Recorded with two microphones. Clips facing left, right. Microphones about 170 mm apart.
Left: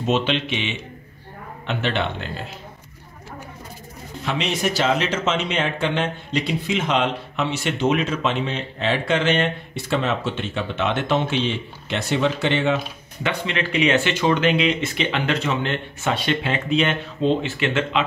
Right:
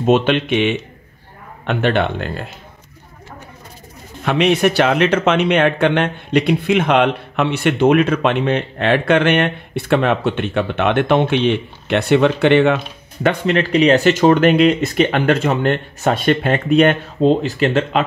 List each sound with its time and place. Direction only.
0.0 s speech: 55° right (ahead or behind)
4.2 s speech: 60° right (ahead or behind); by 18.0 s 40° right (ahead or behind)